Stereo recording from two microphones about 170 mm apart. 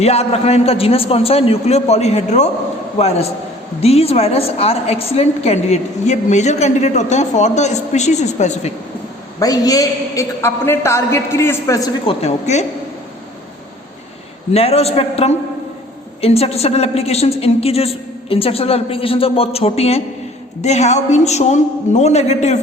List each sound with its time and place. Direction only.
0.0 s a woman's voice: 40° left (ahead or behind)
9.4 s a man's voice: 20° left (ahead or behind)
12.0 s a woman's voice: 40° left (ahead or behind)
14.5 s a woman's voice: 35° left (ahead or behind)